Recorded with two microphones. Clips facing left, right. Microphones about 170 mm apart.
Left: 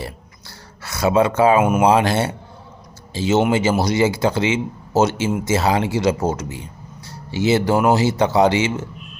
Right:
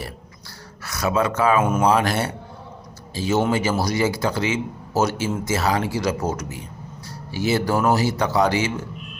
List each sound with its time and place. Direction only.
0.8 s a man's voice: 25° left (ahead or behind)